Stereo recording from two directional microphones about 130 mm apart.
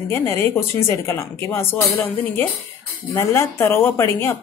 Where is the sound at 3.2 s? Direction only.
20° left (ahead or behind).